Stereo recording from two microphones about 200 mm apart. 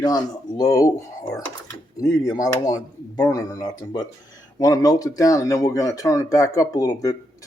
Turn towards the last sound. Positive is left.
turn(degrees=15)  # may be behind; listen again after turning